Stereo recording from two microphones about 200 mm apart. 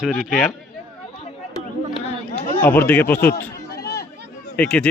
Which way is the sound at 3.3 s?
50° left (ahead or behind).